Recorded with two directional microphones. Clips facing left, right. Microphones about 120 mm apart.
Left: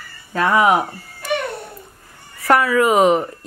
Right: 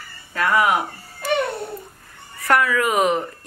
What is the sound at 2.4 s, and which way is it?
Speech, 25° left (ahead or behind).